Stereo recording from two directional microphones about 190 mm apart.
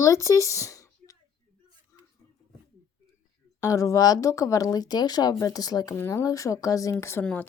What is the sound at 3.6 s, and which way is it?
Speech, 15° left (ahead or behind).